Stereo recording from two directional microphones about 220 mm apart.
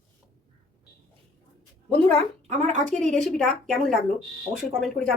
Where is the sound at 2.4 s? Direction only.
30° right (ahead or behind).